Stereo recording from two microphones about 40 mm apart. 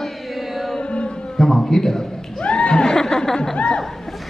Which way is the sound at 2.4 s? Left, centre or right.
Left.